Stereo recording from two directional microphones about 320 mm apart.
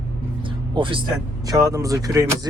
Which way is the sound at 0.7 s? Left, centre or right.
Centre.